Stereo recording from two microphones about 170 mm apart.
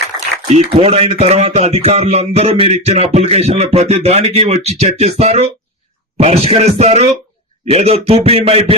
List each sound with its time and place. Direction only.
0.5 s speech: 35° right (ahead or behind)